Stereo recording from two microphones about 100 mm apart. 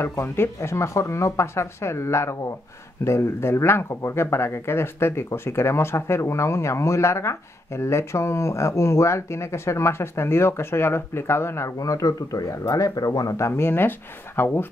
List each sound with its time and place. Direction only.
0.0 s speech: 25° left (ahead or behind)